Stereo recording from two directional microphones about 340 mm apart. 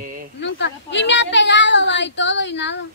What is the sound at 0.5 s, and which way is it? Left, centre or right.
Child singing, left.